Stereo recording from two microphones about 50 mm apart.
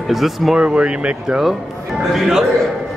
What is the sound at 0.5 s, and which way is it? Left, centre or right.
Speech, right.